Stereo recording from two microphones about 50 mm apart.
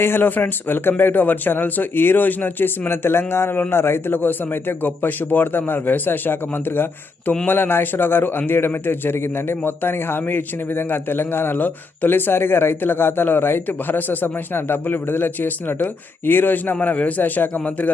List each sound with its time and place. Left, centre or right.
0.0 s a man's voice: left
16.8 s a man's voice: left